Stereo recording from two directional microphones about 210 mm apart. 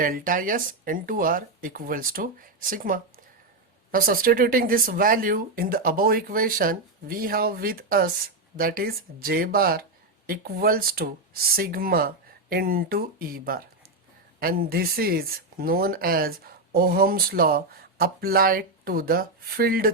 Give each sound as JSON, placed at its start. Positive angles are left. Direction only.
{"t": 0.0, "sound": "speech", "side_deg": -40}